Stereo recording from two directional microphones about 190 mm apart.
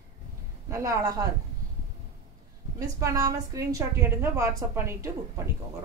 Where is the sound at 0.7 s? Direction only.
15° right (ahead or behind).